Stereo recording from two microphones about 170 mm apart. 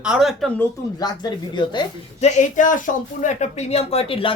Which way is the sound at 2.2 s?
45° left (ahead or behind).